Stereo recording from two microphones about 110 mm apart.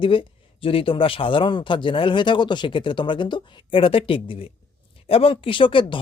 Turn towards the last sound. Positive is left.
turn(degrees=50)  # may be behind; listen again after turning